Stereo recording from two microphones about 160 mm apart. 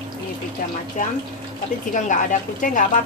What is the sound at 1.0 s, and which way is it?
A woman's voice, 50° left (ahead or behind).